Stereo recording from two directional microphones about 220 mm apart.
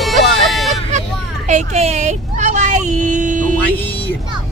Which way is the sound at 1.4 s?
30° right (ahead or behind).